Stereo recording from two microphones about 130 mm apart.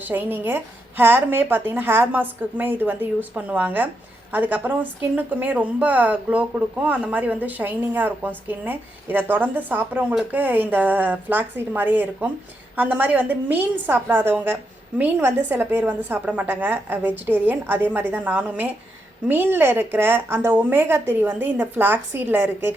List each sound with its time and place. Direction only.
0.0 s a woman's voice: 15° right (ahead or behind)